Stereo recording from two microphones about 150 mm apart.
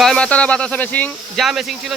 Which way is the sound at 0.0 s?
5° left (ahead or behind).